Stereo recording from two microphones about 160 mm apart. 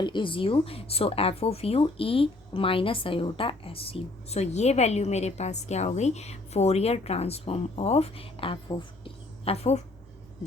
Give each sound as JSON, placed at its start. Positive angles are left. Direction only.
{"t": 0.0, "sound": "speech", "side_deg": 30}